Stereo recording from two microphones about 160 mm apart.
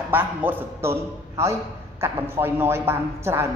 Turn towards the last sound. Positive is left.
turn(degrees=-15)  # may be behind; listen again after turning